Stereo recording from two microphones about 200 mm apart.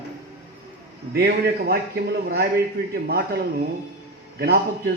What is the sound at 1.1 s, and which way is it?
Speech, 50° right (ahead or behind).